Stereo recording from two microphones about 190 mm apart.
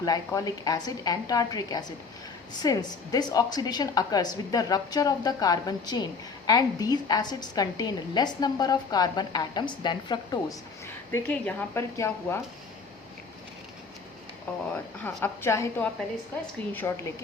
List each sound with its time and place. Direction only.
0.0 s a woman's voice: 20° left (ahead or behind)
11.1 s speech: 10° left (ahead or behind)
15.0 s speech: 10° left (ahead or behind)